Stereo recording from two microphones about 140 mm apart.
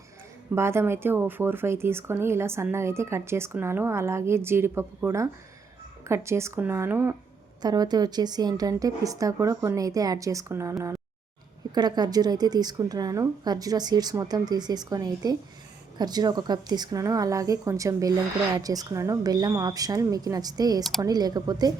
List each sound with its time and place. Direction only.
0.5 s a woman's voice: 20° right (ahead or behind)
7.6 s a woman's voice: 30° right (ahead or behind)